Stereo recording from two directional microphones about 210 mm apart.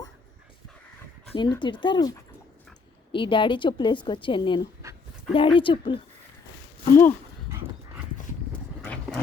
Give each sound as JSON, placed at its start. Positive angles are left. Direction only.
{"t": 1.3, "sound": "a woman's voice", "side_deg": 20}
{"t": 6.9, "sound": "speech", "side_deg": 10}
{"t": 8.8, "sound": "dog", "side_deg": 5}